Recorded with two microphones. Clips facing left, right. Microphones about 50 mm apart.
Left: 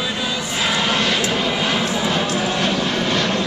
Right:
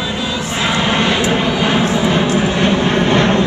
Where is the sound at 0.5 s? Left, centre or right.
Centre.